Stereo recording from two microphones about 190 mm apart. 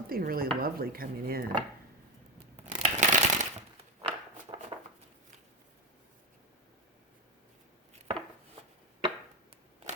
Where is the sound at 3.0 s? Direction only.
40° right (ahead or behind).